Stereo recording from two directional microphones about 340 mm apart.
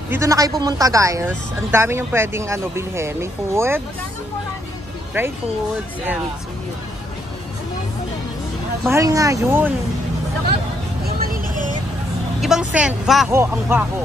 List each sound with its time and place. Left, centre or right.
0.1 s speech: centre
5.2 s speech: centre
8.8 s speech: centre
11.1 s vehicle: right
12.4 s speech: centre